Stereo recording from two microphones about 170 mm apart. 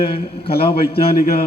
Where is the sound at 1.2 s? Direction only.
65° left (ahead or behind).